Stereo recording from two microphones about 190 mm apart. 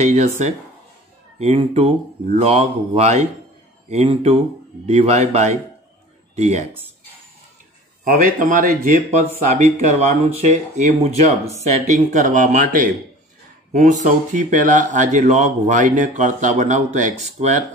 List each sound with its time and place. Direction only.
0.0 s speech: 35° right (ahead or behind)
1.4 s speech: 30° right (ahead or behind)
8.0 s speech: 50° right (ahead or behind)